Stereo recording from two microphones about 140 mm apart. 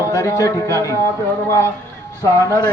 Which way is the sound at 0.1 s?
20° left (ahead or behind).